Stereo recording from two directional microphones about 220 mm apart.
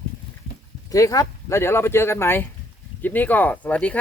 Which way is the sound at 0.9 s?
15° left (ahead or behind).